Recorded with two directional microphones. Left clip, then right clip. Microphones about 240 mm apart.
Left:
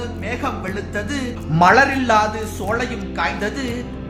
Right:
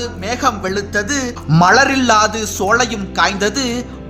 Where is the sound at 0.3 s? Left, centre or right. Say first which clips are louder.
Right 8 dB; right.